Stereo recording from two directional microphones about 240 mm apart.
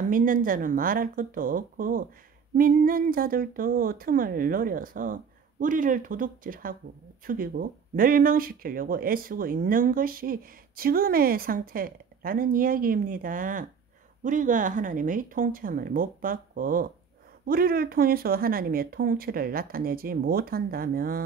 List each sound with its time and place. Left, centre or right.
0.1 s speech: right